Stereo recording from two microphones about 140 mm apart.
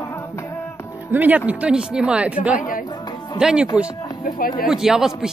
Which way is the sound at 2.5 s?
75° left (ahead or behind).